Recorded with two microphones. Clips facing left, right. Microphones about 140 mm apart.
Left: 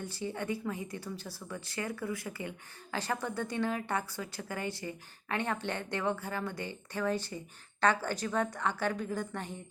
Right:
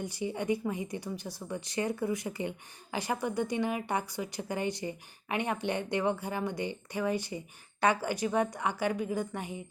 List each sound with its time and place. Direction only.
0.0 s speech: 15° right (ahead or behind)